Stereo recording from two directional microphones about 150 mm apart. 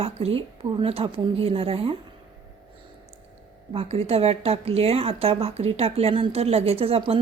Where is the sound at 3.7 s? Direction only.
40° right (ahead or behind).